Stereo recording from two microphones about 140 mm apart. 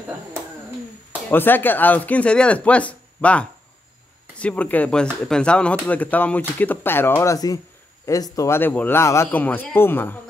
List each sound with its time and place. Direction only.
1.3 s speech: 15° left (ahead or behind)